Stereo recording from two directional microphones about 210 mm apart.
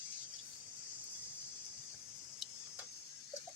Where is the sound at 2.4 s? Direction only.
Centre (ahead or behind).